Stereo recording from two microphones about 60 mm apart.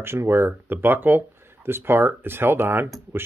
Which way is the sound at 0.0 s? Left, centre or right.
Right.